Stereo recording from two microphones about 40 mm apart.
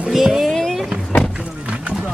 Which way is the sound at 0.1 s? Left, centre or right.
Centre.